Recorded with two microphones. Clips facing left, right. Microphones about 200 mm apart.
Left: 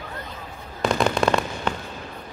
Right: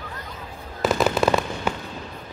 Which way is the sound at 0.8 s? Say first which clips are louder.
Right 1 dB; 5° right (ahead or behind).